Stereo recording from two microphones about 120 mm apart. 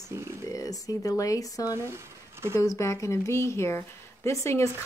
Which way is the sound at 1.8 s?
20° right (ahead or behind).